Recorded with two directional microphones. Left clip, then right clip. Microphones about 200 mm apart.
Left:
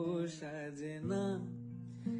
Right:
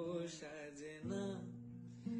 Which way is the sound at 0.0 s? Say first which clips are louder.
Left 5 dB; 50° left (ahead or behind).